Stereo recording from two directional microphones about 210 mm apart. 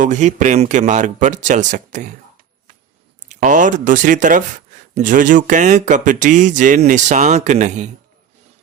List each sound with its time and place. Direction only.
0.0 s speech: 35° right (ahead or behind)
3.2 s speech: 40° right (ahead or behind)